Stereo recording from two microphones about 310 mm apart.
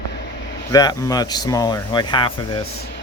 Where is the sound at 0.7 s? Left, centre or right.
Centre.